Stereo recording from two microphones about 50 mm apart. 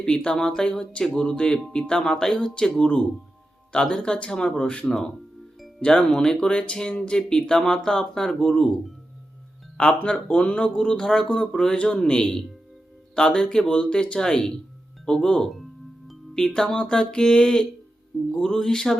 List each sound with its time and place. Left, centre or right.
0.3 s speech: centre
9.7 s speech: left
16.0 s music: centre
16.5 s speech: centre